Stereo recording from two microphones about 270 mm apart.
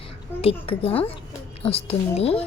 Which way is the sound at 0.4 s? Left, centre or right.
Left.